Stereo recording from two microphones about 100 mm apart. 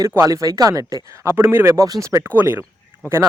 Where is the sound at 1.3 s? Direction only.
20° right (ahead or behind).